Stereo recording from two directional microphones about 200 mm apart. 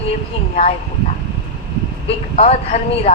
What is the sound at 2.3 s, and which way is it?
Speech, 30° left (ahead or behind).